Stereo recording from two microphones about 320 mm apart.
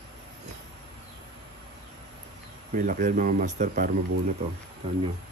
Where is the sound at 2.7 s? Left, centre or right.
Right.